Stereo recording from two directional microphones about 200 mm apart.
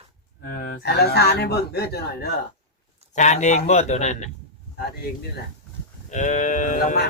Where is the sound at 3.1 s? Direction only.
35° left (ahead or behind).